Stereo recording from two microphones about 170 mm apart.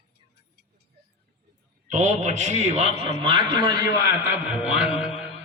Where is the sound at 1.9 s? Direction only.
45° right (ahead or behind); by 5.3 s 5° right (ahead or behind).